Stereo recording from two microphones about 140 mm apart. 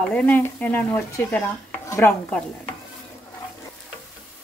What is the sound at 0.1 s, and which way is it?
Speech, 10° left (ahead or behind).